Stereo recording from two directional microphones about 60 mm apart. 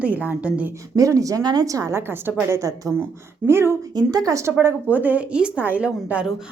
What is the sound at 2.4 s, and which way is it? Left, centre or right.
Speech, right.